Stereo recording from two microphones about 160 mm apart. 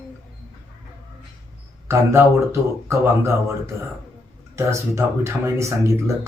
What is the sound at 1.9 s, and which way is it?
Speech, 15° right (ahead or behind).